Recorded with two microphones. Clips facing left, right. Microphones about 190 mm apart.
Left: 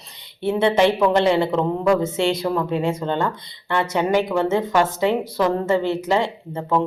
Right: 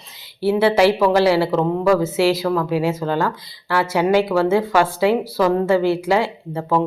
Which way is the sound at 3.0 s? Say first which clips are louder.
Right 2 dB; 25° left (ahead or behind).